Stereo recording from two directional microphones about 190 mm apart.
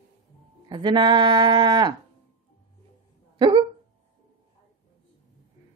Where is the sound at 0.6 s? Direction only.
25° right (ahead or behind).